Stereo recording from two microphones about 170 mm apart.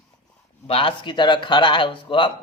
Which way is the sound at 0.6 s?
30° left (ahead or behind).